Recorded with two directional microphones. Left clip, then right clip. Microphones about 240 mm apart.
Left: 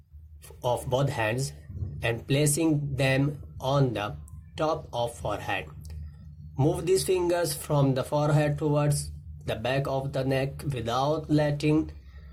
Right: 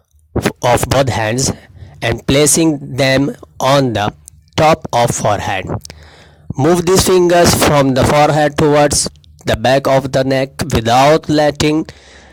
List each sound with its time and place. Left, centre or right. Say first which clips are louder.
0.6 s speech: right 14 dB; right